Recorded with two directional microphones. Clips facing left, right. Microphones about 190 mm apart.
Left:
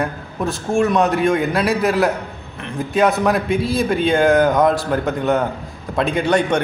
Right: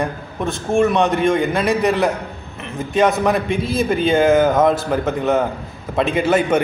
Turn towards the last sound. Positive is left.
turn(degrees=-5)  # may be behind; listen again after turning